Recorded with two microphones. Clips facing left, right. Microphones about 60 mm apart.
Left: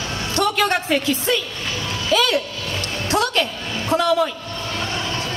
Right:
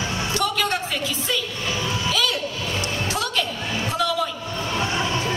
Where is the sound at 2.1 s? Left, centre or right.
Left.